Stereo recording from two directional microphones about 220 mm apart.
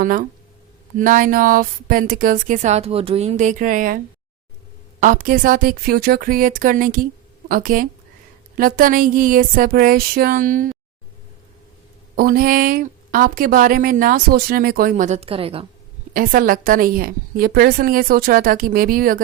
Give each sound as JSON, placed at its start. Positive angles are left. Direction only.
{"t": 0.0, "sound": "a woman's voice", "side_deg": -40}
{"t": 12.1, "sound": "a woman's voice", "side_deg": -40}
{"t": 16.1, "sound": "a woman's voice", "side_deg": -40}